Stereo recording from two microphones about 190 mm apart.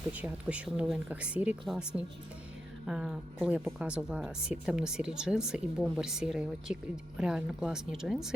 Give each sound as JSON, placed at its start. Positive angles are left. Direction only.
{"t": 0.1, "sound": "a woman's voice", "side_deg": -5}